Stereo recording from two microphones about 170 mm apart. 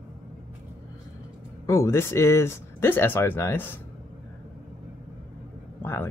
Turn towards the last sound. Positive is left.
turn(degrees=15)  # may be behind; listen again after turning